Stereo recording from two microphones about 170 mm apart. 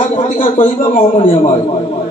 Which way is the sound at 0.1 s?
35° left (ahead or behind).